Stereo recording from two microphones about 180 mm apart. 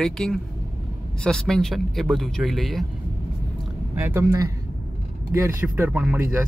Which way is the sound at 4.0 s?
15° right (ahead or behind).